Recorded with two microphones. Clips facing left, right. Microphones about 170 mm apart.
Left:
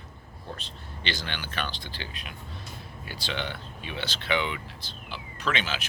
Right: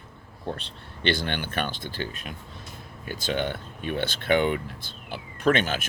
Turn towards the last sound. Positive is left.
turn(degrees=-50)  # may be behind; listen again after turning